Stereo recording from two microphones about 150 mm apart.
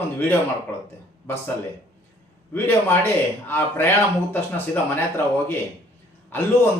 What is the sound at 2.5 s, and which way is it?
A man's voice, 15° left (ahead or behind).